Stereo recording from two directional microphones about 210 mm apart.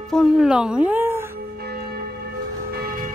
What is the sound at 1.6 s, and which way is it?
Church bell, 45° right (ahead or behind).